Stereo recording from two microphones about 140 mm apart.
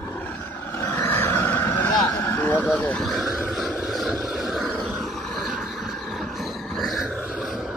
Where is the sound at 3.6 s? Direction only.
Centre (ahead or behind).